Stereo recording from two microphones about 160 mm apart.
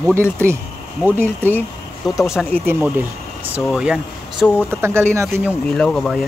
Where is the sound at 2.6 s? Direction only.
15° right (ahead or behind).